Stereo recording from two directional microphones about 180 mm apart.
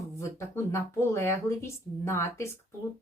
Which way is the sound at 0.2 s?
15° left (ahead or behind).